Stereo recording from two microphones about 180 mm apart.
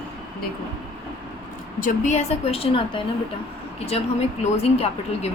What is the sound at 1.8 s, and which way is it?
A woman's voice, 40° left (ahead or behind).